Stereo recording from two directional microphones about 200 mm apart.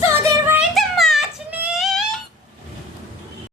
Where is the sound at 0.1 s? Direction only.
10° right (ahead or behind).